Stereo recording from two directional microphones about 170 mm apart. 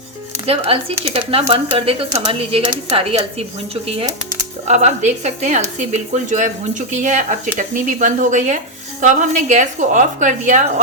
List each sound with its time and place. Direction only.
0.4 s speech: 35° right (ahead or behind)
4.7 s speech: 40° right (ahead or behind)